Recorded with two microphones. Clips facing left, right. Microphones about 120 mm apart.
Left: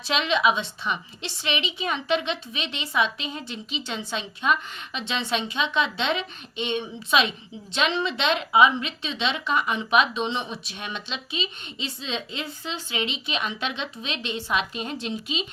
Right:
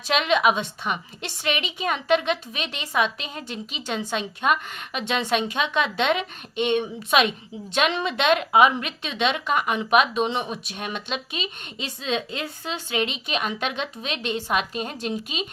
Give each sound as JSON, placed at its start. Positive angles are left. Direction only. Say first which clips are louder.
{"t": 0.1, "sound": "a woman's voice", "louder": "right 2 dB", "side_deg": -50}